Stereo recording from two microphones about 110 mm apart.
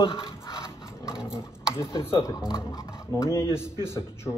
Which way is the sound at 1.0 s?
5° right (ahead or behind).